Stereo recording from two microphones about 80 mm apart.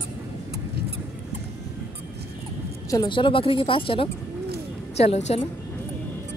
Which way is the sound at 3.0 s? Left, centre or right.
Left.